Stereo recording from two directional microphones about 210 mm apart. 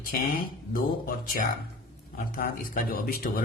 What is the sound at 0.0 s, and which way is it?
Speech, 40° left (ahead or behind).